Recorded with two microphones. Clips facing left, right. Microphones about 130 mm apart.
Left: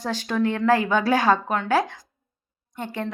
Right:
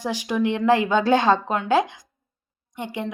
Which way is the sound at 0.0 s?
10° right (ahead or behind).